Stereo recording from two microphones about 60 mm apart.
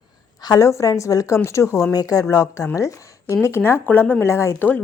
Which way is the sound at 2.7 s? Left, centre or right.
Left.